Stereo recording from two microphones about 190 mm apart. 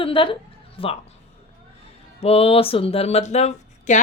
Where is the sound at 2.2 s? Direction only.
30° left (ahead or behind).